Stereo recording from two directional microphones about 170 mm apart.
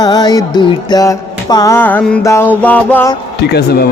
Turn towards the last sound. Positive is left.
turn(degrees=65)  # may be behind; listen again after turning